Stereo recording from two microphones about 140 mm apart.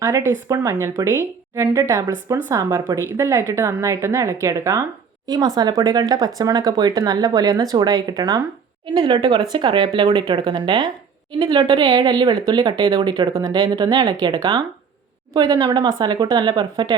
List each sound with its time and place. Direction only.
0.0 s speech: 20° right (ahead or behind)